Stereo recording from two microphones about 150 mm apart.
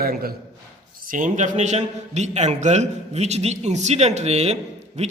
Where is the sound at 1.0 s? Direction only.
65° right (ahead or behind).